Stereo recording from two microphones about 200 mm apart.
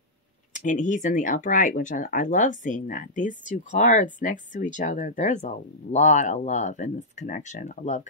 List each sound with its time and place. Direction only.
0.5 s speech: 40° left (ahead or behind)